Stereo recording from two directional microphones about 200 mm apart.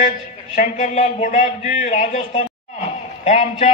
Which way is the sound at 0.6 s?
35° left (ahead or behind).